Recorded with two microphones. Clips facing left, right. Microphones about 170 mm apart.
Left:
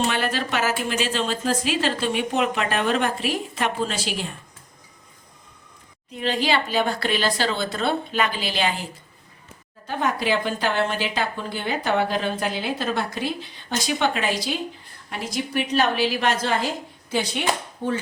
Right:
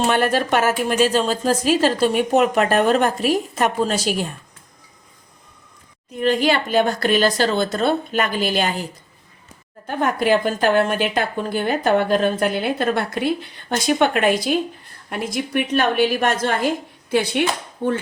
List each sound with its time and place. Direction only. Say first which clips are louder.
0.1 s a woman's voice: right 7 dB; 50° right (ahead or behind)
6.1 s a woman's voice: right 5 dB; 50° right (ahead or behind)